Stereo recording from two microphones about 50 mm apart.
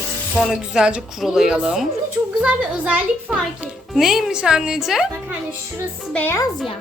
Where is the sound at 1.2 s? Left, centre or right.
Centre.